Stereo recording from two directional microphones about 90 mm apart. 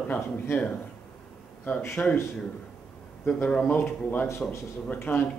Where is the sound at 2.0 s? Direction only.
20° left (ahead or behind).